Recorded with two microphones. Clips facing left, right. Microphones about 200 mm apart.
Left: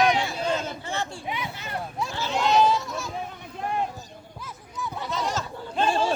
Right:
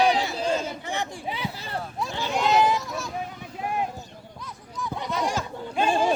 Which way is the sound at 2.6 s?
15° right (ahead or behind).